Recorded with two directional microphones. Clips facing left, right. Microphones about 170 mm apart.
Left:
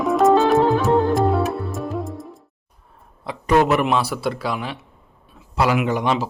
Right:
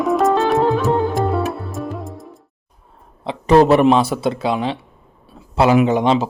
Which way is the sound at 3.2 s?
30° right (ahead or behind).